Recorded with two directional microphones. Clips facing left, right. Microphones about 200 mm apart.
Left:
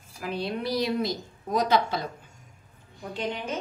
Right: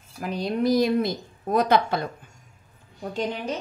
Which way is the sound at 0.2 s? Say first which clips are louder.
Right 5 dB; 45° right (ahead or behind).